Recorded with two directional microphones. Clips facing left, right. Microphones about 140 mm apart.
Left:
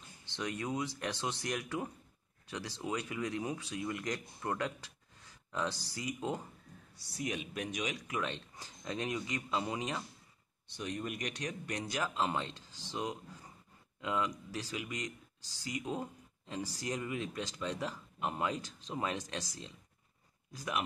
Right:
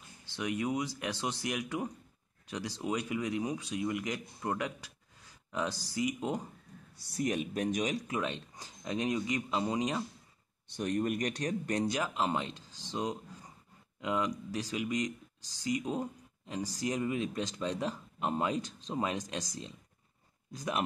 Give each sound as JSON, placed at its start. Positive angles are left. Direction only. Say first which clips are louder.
{"t": 0.2, "sound": "speech", "louder": "right 4 dB", "side_deg": -10}
{"t": 7.2, "sound": "speech", "louder": "right 6 dB", "side_deg": -45}
{"t": 8.2, "sound": "speech", "louder": "right 3 dB", "side_deg": -20}
{"t": 10.7, "sound": "speech", "louder": "right 8 dB", "side_deg": -50}
{"t": 11.9, "sound": "speech", "louder": "right 2 dB", "side_deg": -20}